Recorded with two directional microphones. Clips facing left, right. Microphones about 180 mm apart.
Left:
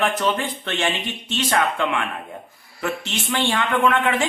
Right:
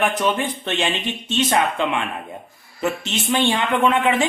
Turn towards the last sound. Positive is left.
turn(degrees=-20)  # may be behind; listen again after turning